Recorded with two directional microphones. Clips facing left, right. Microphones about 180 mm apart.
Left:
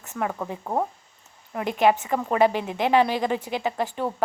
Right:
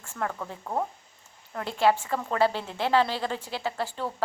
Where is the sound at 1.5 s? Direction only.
15° left (ahead or behind).